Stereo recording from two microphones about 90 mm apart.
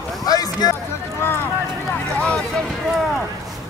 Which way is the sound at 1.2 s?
25° left (ahead or behind).